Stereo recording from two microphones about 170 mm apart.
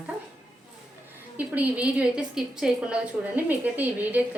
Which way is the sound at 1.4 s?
10° right (ahead or behind).